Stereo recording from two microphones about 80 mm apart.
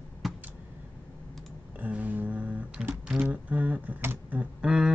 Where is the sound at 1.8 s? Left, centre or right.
Centre.